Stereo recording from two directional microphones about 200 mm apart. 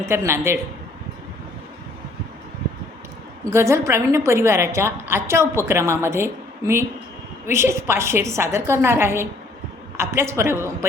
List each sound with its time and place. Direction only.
0.0 s a woman's voice: 15° right (ahead or behind)
3.5 s a woman's voice: 15° right (ahead or behind)